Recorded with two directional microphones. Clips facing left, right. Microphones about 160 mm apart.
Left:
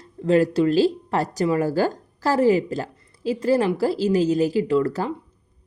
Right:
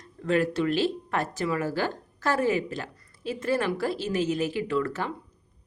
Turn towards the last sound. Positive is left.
turn(degrees=35)  # may be behind; listen again after turning